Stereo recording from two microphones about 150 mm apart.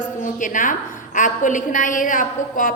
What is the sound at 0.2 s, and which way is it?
A woman's voice, 60° left (ahead or behind).